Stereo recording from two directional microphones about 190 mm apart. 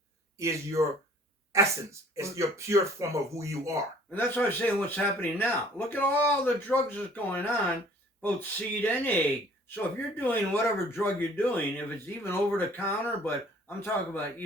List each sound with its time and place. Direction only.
0.3 s speech: 15° right (ahead or behind)
4.1 s speech: 10° left (ahead or behind)